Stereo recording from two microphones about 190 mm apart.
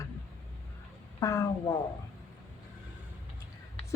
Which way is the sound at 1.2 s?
15° left (ahead or behind).